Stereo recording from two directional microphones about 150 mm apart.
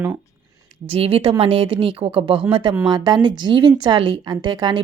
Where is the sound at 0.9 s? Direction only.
40° right (ahead or behind).